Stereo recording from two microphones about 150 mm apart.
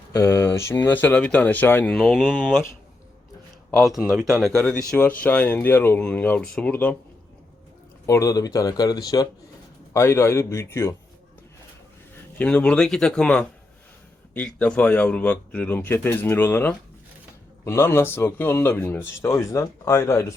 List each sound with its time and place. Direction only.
0.1 s speech: 20° left (ahead or behind); by 2.4 s centre (ahead or behind)
3.7 s speech: centre (ahead or behind)
8.0 s speech: 20° left (ahead or behind)
12.4 s speech: 10° left (ahead or behind)